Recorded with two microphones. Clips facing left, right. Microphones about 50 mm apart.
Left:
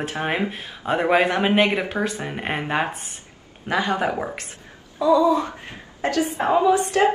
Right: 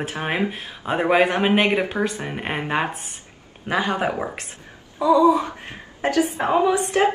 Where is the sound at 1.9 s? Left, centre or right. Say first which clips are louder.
Right 1 dB; centre.